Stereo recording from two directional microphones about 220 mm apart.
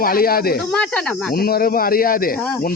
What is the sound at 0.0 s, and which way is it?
Speech, 40° left (ahead or behind).